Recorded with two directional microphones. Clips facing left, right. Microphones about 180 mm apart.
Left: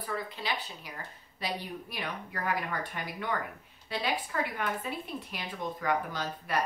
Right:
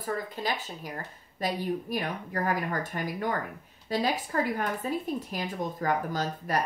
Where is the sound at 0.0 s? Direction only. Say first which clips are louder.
Right 4 dB; 45° right (ahead or behind).